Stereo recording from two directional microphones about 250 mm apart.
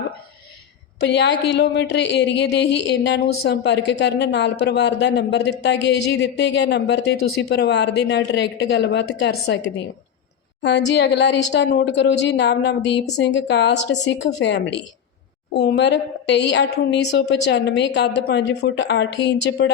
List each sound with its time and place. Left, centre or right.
1.0 s a woman's voice: left